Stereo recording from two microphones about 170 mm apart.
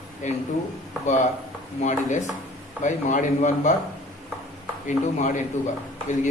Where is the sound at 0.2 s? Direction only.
50° left (ahead or behind).